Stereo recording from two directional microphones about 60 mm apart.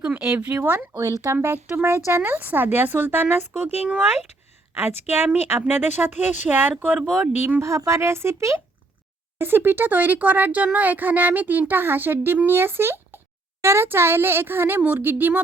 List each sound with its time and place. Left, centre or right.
0.2 s speech: right
0.9 s speech: right
4.8 s speech: right
7.0 s speech: centre
7.6 s speech: right
9.4 s speech: right